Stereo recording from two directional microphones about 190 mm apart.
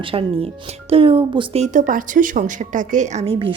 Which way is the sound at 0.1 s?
30° right (ahead or behind).